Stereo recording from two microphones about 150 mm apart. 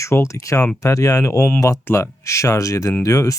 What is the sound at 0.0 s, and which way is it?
Speech, 20° left (ahead or behind).